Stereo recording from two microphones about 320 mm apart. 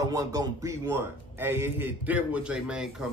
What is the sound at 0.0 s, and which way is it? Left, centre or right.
A man's voice, centre.